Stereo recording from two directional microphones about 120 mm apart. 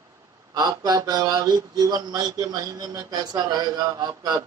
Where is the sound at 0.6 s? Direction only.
30° right (ahead or behind).